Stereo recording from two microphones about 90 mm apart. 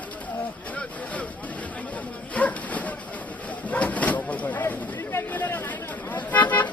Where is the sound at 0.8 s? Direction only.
15° left (ahead or behind).